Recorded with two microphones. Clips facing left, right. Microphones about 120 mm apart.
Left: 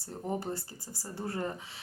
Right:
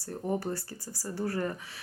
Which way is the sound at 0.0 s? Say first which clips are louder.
Right 3 dB; 20° left (ahead or behind).